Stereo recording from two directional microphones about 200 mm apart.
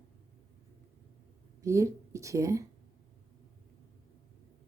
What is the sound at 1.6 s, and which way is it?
Speech, 15° right (ahead or behind).